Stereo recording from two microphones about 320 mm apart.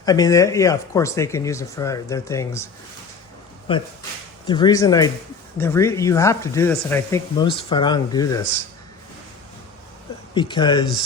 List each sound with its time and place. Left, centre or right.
0.0 s speech: centre
3.7 s speech: centre
10.3 s speech: centre